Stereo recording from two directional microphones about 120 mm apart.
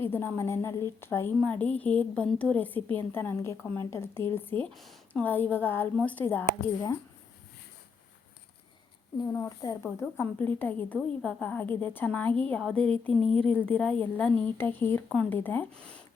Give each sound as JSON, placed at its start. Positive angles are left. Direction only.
{"t": 0.0, "sound": "a woman's voice", "side_deg": 20}
{"t": 4.7, "sound": "speech", "side_deg": 0}
{"t": 5.2, "sound": "a woman's voice", "side_deg": 15}
{"t": 9.2, "sound": "a woman's voice", "side_deg": 30}